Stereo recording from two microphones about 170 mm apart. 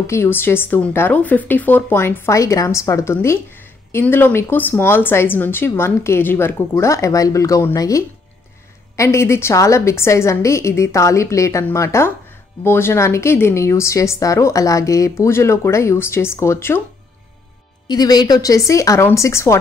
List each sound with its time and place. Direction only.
0.0 s speech: 15° left (ahead or behind)
17.8 s speech: 25° left (ahead or behind)